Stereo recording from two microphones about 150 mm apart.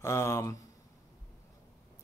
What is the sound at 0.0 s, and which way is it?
Speech, 20° left (ahead or behind).